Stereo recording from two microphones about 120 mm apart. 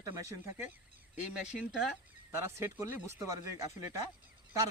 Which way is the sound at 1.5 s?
5° right (ahead or behind).